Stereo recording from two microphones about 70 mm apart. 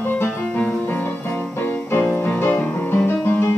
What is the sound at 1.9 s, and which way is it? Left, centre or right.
Music, left.